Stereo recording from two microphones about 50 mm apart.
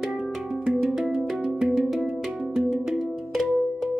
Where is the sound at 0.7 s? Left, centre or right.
Centre.